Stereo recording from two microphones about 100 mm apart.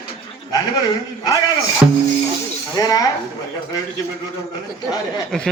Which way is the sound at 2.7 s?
40° left (ahead or behind).